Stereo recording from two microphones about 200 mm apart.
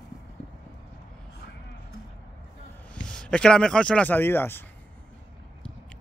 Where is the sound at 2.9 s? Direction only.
5° left (ahead or behind).